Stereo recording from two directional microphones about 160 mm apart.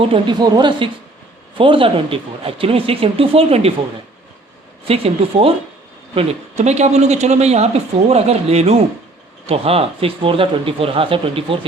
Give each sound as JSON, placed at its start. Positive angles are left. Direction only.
{"t": 0.0, "sound": "speech", "side_deg": -30}
{"t": 4.9, "sound": "speech", "side_deg": -35}